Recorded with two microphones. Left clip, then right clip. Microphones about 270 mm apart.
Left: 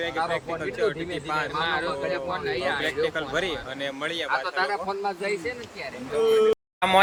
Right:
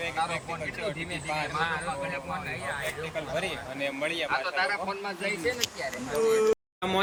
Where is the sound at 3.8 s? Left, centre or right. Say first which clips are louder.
Even; centre.